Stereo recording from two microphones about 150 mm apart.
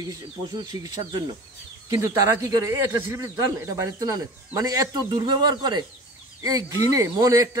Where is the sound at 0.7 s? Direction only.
25° right (ahead or behind).